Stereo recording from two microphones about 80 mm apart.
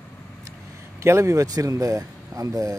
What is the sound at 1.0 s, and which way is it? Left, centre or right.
Speech, right.